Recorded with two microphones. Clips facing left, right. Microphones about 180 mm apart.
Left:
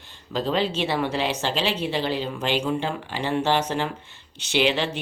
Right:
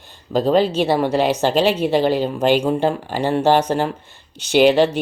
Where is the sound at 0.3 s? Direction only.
45° right (ahead or behind).